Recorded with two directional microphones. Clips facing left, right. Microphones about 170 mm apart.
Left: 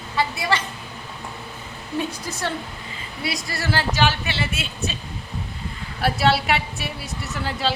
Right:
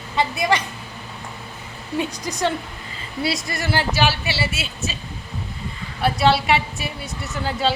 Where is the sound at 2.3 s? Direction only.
15° right (ahead or behind).